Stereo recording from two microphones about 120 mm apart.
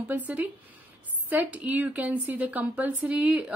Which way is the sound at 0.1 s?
15° right (ahead or behind).